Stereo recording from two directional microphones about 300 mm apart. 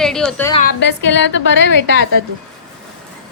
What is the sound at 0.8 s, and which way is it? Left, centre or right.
Speech, left.